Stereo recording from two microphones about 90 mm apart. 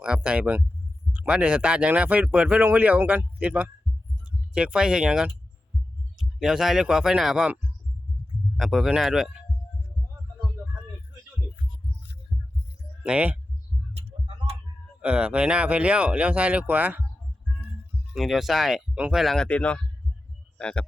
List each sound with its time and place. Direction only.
0.0 s speech: 10° right (ahead or behind)
8.5 s speech: centre (ahead or behind)
12.3 s heart sounds: centre (ahead or behind)
13.0 s speech: 15° right (ahead or behind)
14.1 s tick-tock: 90° right
15.0 s speech: 15° right (ahead or behind)
18.1 s speech: 5° right (ahead or behind)
18.9 s speech: 15° right (ahead or behind)
19.2 s speech: centre (ahead or behind)
19.5 s speech: 15° left (ahead or behind)